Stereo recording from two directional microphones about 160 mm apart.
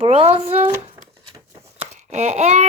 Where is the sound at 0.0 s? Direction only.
40° right (ahead or behind).